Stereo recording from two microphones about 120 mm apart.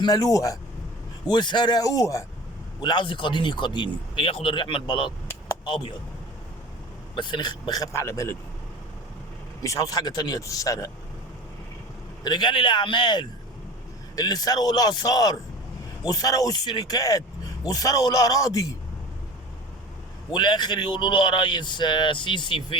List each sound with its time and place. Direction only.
0.0 s speech: 30° left (ahead or behind)
1.3 s speech: 40° left (ahead or behind)
2.8 s speech: 40° left (ahead or behind)
7.2 s speech: 40° left (ahead or behind); by 8.4 s 25° left (ahead or behind)
9.6 s speech: 30° left (ahead or behind)
12.2 s speech: 40° left (ahead or behind)
20.3 s speech: 35° left (ahead or behind)